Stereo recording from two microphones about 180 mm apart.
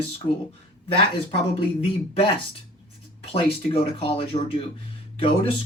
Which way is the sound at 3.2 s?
35° left (ahead or behind).